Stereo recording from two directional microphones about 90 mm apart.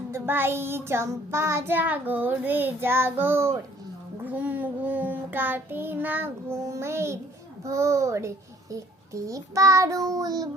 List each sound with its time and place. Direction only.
0.1 s child singing: 25° right (ahead or behind)
4.2 s child singing: 15° right (ahead or behind); by 10.5 s 45° right (ahead or behind)